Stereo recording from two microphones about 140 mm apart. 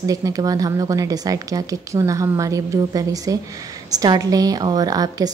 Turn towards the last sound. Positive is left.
turn(degrees=-25)  # may be behind; listen again after turning